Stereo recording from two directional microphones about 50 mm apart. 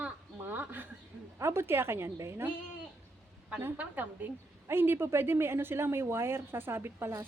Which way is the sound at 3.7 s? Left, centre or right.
Right.